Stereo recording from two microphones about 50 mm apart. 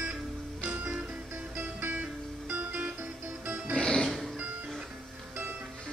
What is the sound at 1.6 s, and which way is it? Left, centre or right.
Music, right.